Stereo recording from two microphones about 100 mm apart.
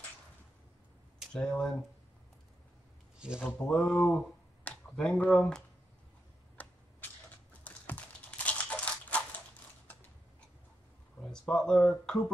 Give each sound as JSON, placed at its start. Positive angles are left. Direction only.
{"t": 1.3, "sound": "speech", "side_deg": 5}
{"t": 3.2, "sound": "speech", "side_deg": -10}
{"t": 3.6, "sound": "speech", "side_deg": 5}
{"t": 4.6, "sound": "a sound", "side_deg": 5}
{"t": 5.3, "sound": "speech", "side_deg": 0}
{"t": 6.6, "sound": "a sound", "side_deg": 15}
{"t": 9.9, "sound": "mechanisms", "side_deg": 20}
{"t": 11.1, "sound": "speech", "side_deg": 10}